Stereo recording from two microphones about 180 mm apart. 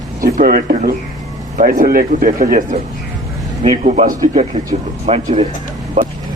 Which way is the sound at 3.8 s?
40° right (ahead or behind).